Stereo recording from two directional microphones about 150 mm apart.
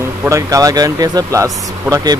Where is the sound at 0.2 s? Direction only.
20° right (ahead or behind).